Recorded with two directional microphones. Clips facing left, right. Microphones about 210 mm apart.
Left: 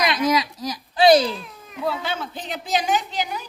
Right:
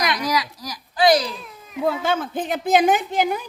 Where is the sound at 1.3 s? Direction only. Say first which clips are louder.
Left 2 dB; centre (ahead or behind).